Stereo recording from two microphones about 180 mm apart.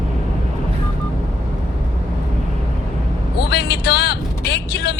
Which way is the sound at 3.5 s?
65° left (ahead or behind).